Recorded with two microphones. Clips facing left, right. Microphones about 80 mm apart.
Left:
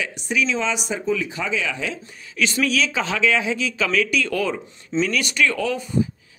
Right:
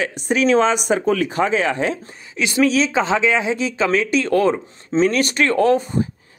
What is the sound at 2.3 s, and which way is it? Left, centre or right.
Speech, right.